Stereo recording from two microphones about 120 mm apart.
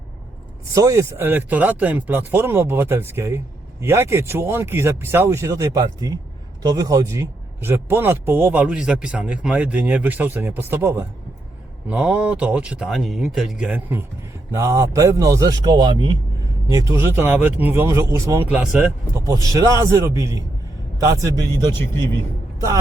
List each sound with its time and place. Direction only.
0.7 s speech: 25° right (ahead or behind); by 13.7 s centre (ahead or behind)
13.7 s speech: 15° right (ahead or behind); by 16.1 s 40° right (ahead or behind)
16.9 s speech: 20° right (ahead or behind)
18.5 s speech: 10° right (ahead or behind)
19.1 s speech: 25° right (ahead or behind)